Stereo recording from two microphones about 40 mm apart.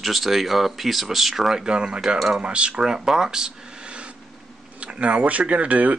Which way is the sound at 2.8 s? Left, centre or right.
Centre.